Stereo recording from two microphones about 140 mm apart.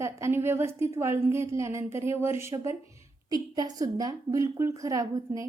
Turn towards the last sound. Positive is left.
turn(degrees=-25)  # may be behind; listen again after turning